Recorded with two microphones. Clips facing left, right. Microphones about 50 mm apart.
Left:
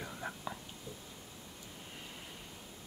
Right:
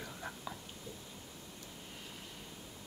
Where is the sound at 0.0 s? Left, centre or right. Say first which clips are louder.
Left 2 dB; centre.